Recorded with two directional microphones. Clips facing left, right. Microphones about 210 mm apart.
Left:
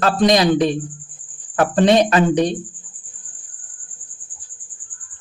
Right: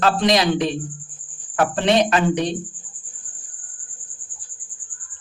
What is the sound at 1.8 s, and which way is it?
Speech, 40° left (ahead or behind).